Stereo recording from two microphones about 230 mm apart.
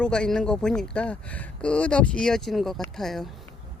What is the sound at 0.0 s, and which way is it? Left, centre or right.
Speech, centre.